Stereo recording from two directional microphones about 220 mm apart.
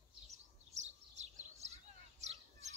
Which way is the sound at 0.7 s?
30° right (ahead or behind).